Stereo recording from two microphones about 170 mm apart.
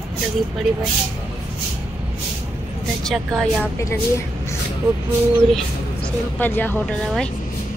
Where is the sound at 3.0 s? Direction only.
5° left (ahead or behind).